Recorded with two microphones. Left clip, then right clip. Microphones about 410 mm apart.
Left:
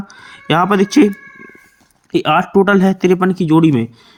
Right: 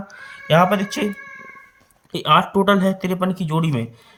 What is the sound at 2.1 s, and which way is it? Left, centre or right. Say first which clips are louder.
Speech: left 4 dB; centre.